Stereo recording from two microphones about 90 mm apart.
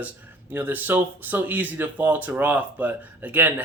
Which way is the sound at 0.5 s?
20° right (ahead or behind).